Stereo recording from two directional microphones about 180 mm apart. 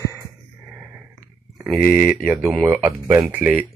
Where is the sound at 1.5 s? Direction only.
5° right (ahead or behind).